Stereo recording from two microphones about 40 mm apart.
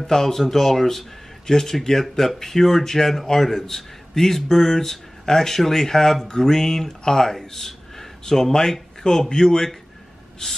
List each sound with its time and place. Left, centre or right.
0.0 s speech: centre